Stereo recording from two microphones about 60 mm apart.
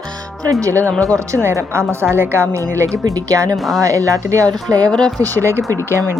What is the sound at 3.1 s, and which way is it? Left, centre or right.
Speech, right.